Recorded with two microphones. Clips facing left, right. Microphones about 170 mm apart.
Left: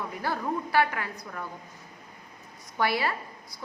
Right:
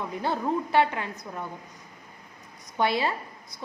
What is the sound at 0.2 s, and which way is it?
A woman's voice, 25° right (ahead or behind).